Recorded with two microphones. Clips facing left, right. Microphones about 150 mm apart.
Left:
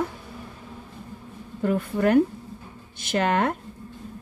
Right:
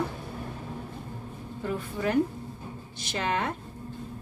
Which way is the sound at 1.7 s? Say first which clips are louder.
Left 8 dB; 65° left (ahead or behind).